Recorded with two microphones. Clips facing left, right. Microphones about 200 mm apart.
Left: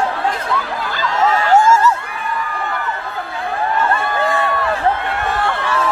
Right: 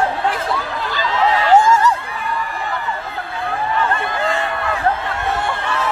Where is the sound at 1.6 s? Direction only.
15° right (ahead or behind).